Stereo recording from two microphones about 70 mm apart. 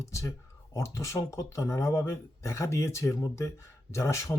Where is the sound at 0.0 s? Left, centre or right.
Left.